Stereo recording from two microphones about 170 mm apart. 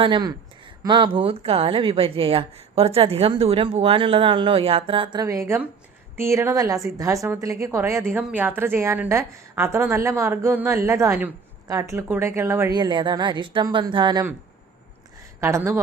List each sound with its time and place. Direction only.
0.0 s speech: 25° right (ahead or behind)
5.2 s a woman's voice: 20° right (ahead or behind)
15.4 s a woman's voice: 15° right (ahead or behind)